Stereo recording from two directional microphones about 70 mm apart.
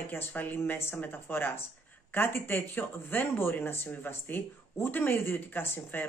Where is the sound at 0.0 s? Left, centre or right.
Left.